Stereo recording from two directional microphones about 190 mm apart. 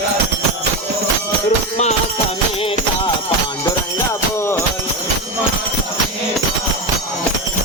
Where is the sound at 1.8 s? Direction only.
35° left (ahead or behind).